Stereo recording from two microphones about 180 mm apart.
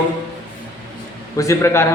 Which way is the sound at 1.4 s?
15° left (ahead or behind).